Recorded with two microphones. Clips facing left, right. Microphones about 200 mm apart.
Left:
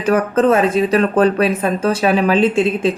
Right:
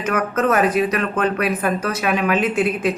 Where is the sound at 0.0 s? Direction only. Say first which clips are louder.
Left 6 dB; 35° left (ahead or behind).